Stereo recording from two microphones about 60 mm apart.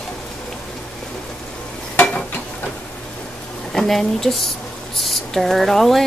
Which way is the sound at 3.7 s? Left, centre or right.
Centre.